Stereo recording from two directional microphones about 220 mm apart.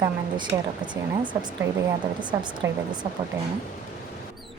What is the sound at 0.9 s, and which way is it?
Speech, 20° right (ahead or behind).